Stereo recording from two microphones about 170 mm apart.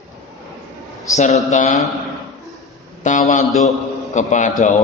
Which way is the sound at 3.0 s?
45° left (ahead or behind).